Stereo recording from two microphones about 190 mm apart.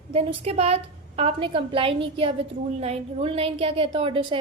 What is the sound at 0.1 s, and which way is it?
A woman's voice, 30° right (ahead or behind).